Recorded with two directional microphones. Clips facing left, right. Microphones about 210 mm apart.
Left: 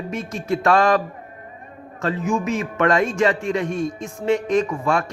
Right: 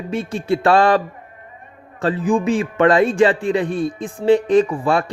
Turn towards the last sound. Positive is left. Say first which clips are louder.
# right 4 dB
turn(degrees=-30)  # may be behind; listen again after turning